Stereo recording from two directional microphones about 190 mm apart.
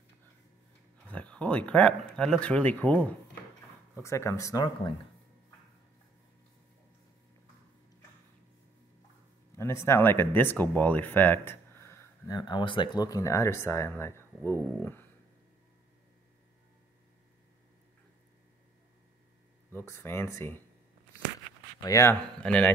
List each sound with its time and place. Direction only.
1.0 s speech: 5° left (ahead or behind)
9.6 s speech: 15° left (ahead or behind)
19.7 s speech: 10° left (ahead or behind)
21.8 s speech: 15° left (ahead or behind)
22.4 s speech: 5° left (ahead or behind)